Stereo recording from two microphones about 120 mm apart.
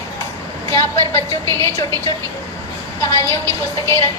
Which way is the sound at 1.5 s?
20° left (ahead or behind).